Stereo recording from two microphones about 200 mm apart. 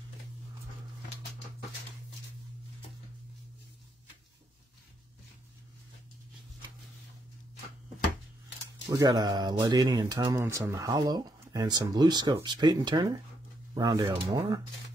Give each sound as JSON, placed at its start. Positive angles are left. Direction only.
{"t": 8.9, "sound": "speech", "side_deg": -20}